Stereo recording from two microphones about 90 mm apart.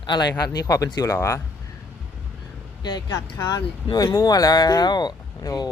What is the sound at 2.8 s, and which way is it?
Speech, 50° left (ahead or behind).